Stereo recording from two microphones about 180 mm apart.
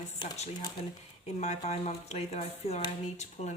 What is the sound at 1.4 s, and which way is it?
A woman's voice, 35° left (ahead or behind).